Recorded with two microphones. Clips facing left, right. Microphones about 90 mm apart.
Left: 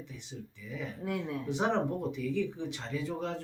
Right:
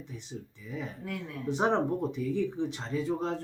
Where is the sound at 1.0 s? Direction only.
20° left (ahead or behind).